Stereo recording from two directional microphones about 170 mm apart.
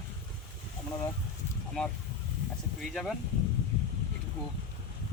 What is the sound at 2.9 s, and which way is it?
Speech, centre (ahead or behind).